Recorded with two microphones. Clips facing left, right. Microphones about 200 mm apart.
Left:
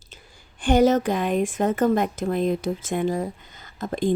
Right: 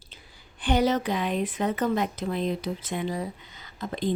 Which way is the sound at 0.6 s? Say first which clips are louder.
Left 6 dB; 45° left (ahead or behind).